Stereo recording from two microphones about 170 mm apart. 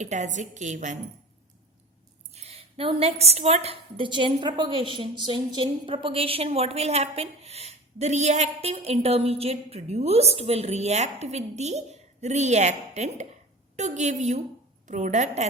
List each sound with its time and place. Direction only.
0.0 s a woman's voice: 45° right (ahead or behind)
2.3 s a woman's voice: 40° right (ahead or behind)